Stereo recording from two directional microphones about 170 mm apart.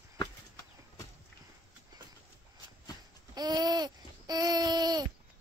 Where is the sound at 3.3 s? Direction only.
25° right (ahead or behind).